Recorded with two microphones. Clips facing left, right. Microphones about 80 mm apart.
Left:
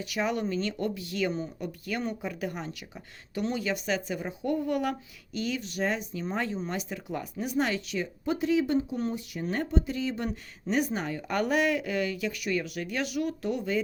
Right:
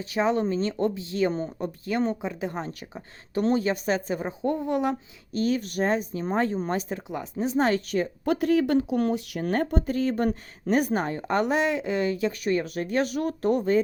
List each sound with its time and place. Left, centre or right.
0.0 s speech: right
5.3 s speech: right
7.7 s speech: right
8.2 s speech: right
11.3 s speech: right